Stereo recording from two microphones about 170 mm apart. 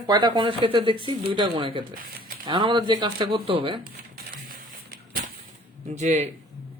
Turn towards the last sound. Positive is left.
turn(degrees=-45)  # may be behind; listen again after turning